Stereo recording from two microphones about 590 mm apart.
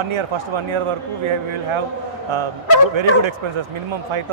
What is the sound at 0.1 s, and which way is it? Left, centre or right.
Speech, right.